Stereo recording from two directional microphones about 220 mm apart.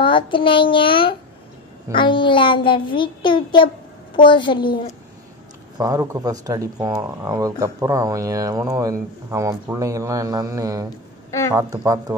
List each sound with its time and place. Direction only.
0.0 s a child's voice: 25° left (ahead or behind)
5.8 s speech: 15° right (ahead or behind)